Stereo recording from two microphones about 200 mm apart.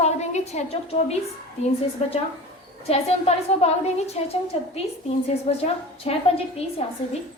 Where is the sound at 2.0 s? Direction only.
30° left (ahead or behind).